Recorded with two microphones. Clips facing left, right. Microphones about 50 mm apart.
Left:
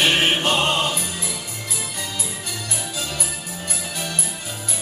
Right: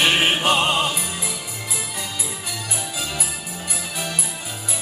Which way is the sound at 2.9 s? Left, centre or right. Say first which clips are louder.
Even; centre.